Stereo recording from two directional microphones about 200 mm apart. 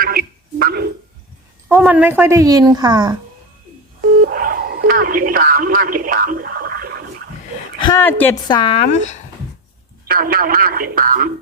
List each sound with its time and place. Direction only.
0.0 s a sound: 45° right (ahead or behind)
1.6 s speech: 10° right (ahead or behind)
4.2 s sidetone: 45° right (ahead or behind)
7.9 s a woman's voice: 10° left (ahead or behind)
8.4 s speech: 25° left (ahead or behind)
10.1 s speech: 45° right (ahead or behind)